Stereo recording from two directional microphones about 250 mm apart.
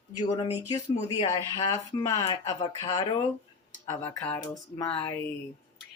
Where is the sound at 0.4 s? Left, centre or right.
Left.